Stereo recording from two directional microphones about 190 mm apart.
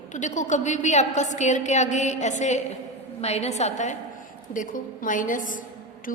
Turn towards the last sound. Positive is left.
turn(degrees=45)  # may be behind; listen again after turning